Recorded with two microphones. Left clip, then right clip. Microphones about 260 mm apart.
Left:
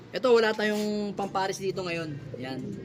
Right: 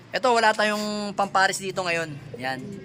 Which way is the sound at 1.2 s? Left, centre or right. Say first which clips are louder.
Right 11 dB; right.